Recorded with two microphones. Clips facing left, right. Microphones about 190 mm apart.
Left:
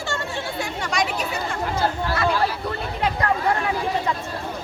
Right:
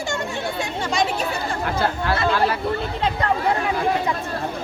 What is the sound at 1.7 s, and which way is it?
Speech, 60° right (ahead or behind).